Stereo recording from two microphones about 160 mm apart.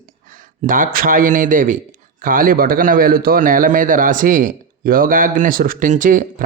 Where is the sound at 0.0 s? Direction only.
60° right (ahead or behind).